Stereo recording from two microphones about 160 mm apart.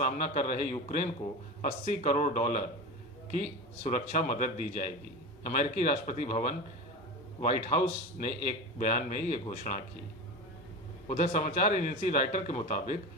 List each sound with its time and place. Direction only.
0.0 s speech: 55° left (ahead or behind)
3.8 s speech: 55° left (ahead or behind)
11.1 s speech: 50° left (ahead or behind)